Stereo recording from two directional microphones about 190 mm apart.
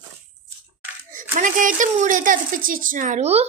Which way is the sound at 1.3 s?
45° right (ahead or behind).